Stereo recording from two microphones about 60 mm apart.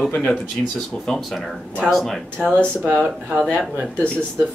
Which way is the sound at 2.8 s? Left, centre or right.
Right.